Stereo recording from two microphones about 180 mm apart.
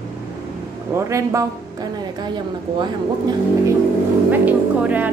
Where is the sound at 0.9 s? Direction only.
15° right (ahead or behind).